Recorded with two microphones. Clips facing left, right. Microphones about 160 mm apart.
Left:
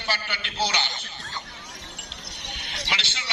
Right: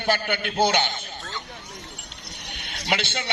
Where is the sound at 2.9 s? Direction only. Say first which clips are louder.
Right 9 dB; 55° right (ahead or behind).